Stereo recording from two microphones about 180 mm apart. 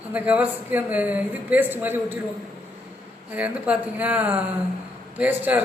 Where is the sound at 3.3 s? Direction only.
10° right (ahead or behind).